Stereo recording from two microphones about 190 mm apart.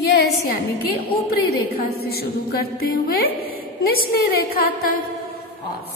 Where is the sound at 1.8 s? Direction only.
55° left (ahead or behind).